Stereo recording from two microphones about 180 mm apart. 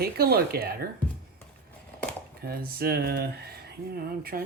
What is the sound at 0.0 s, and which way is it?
Speech, 60° right (ahead or behind).